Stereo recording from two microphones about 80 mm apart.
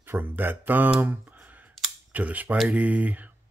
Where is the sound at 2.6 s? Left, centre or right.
Centre.